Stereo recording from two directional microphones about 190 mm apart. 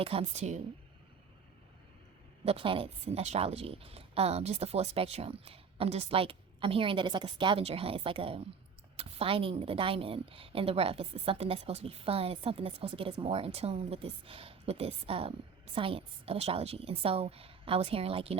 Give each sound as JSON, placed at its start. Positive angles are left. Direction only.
{"t": 0.0, "sound": "a woman's voice", "side_deg": -30}
{"t": 2.4, "sound": "a woman's voice", "side_deg": -30}